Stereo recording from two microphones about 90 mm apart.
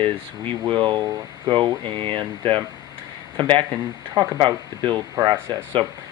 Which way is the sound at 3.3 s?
65° right (ahead or behind).